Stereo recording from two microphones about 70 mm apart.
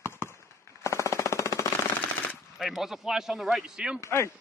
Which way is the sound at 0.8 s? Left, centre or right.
Left.